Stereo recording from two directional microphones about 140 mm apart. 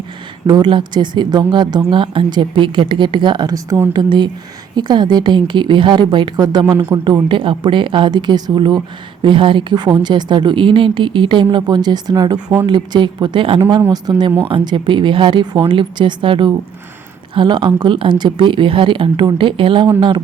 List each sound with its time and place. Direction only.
0.4 s speech: 35° right (ahead or behind)